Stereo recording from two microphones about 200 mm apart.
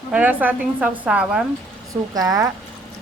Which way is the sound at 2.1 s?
15° right (ahead or behind).